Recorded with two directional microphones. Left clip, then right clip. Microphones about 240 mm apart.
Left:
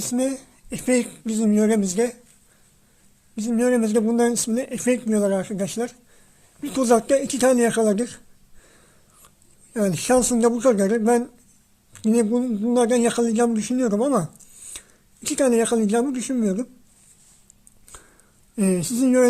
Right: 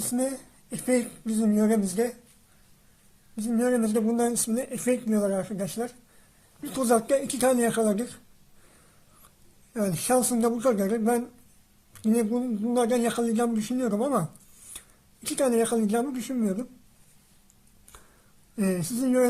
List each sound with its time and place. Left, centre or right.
0.0 s speech: left
3.3 s speech: left
9.7 s speech: left
18.5 s speech: left